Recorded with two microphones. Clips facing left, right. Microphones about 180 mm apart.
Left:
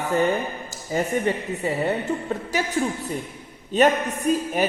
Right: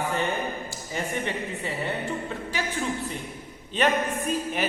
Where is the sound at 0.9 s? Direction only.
40° left (ahead or behind).